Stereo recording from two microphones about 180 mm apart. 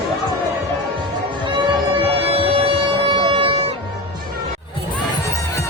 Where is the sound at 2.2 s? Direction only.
30° right (ahead or behind).